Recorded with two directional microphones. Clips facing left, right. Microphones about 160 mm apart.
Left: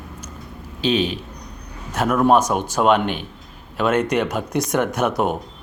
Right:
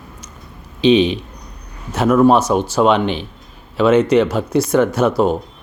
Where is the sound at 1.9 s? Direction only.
10° left (ahead or behind).